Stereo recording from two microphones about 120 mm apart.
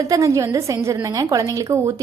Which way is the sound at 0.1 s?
25° right (ahead or behind).